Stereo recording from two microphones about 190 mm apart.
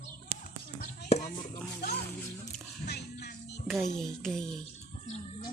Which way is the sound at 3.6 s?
Centre (ahead or behind).